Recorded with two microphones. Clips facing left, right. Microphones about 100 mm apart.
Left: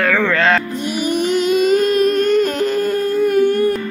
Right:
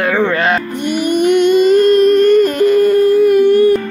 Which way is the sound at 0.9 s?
Centre (ahead or behind).